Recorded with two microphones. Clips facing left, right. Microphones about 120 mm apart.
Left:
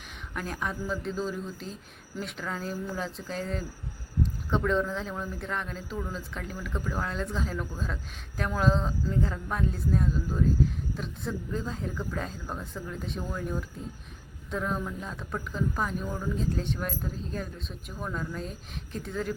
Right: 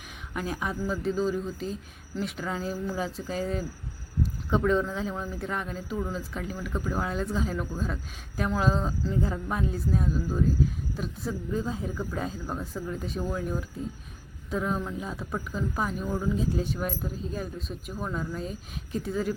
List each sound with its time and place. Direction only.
0.3 s speech: 5° right (ahead or behind)